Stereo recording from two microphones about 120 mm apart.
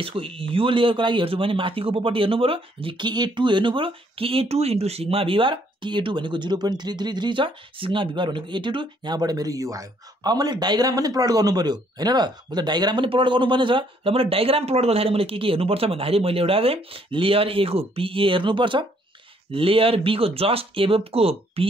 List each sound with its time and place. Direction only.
0.0 s speech: 50° right (ahead or behind)